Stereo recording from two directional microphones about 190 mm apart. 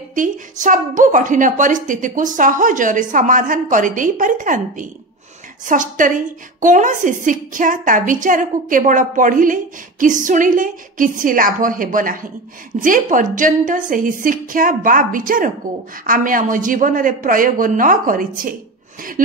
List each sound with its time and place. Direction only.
0.1 s a woman's voice: 45° right (ahead or behind)